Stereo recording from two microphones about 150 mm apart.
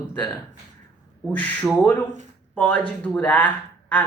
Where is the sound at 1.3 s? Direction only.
10° left (ahead or behind).